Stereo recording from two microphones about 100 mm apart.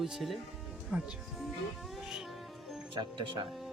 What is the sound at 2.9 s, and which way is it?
Speech, 55° right (ahead or behind).